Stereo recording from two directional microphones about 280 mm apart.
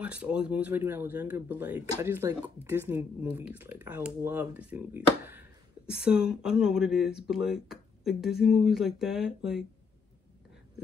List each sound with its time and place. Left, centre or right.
0.0 s speech: centre